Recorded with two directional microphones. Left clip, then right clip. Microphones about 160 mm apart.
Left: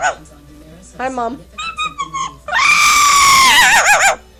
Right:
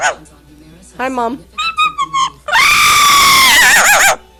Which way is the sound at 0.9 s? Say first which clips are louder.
Right 3 dB; 35° right (ahead or behind).